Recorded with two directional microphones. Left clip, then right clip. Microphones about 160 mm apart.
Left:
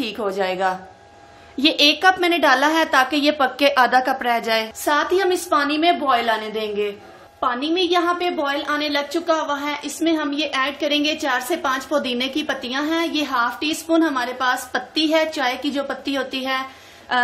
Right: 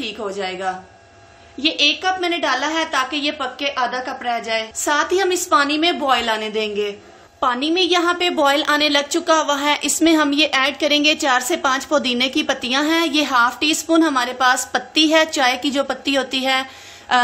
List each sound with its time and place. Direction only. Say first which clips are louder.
0.0 s a woman's voice: left 2 dB; 25° left (ahead or behind)
4.8 s a woman's voice: right 1 dB; 15° right (ahead or behind)
7.3 s a woman's voice: right 3 dB; 25° right (ahead or behind)
8.4 s a woman's voice: right 6 dB; 35° right (ahead or behind)